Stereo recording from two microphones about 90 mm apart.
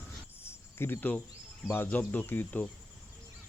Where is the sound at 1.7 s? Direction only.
25° left (ahead or behind).